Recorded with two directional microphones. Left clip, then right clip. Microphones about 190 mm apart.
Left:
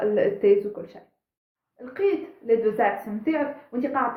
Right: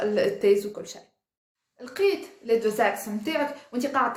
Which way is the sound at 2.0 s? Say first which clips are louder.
Even; 25° right (ahead or behind).